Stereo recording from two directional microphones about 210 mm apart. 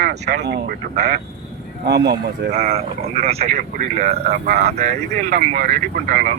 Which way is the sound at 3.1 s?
30° right (ahead or behind).